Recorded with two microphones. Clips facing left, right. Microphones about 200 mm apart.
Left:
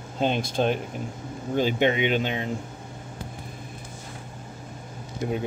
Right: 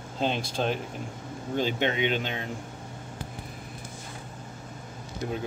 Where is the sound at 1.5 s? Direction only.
10° left (ahead or behind).